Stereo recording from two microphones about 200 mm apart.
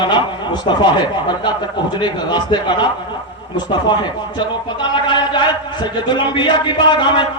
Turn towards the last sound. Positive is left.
turn(degrees=25)  # may be behind; listen again after turning